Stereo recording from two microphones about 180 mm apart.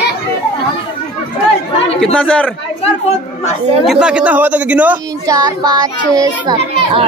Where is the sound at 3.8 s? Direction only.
5° right (ahead or behind).